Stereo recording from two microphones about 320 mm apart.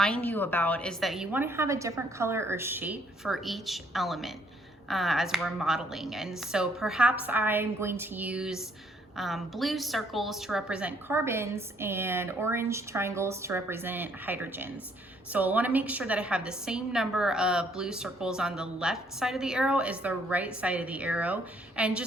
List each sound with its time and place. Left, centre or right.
0.0 s a woman's voice: centre